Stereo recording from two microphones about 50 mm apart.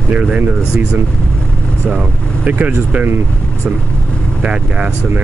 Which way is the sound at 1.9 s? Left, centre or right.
Right.